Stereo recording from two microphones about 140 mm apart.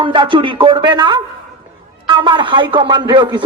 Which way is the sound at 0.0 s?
35° right (ahead or behind).